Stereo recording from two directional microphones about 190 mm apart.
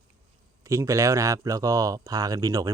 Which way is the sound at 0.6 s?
15° right (ahead or behind).